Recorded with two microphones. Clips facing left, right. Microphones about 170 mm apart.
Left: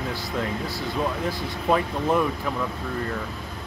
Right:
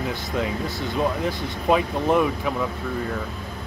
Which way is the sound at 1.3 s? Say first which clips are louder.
Right 2 dB; 15° right (ahead or behind).